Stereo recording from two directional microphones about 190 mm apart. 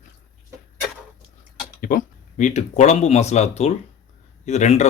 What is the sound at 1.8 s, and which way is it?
Speech, 45° left (ahead or behind).